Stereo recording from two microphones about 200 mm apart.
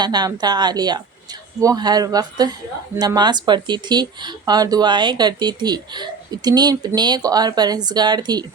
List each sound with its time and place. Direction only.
0.0 s speech: 20° right (ahead or behind)